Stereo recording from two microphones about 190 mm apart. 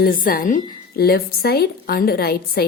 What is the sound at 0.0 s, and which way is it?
A woman's voice, 50° left (ahead or behind).